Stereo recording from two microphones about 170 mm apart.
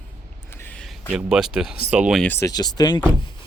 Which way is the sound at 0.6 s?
10° left (ahead or behind).